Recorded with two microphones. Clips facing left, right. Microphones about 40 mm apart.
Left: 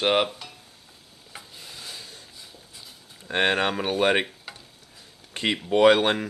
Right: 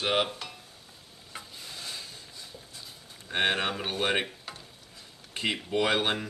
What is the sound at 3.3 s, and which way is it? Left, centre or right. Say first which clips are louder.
Speech: left 5 dB; left.